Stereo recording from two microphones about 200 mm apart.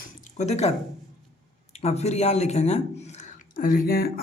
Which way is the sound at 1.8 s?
35° left (ahead or behind).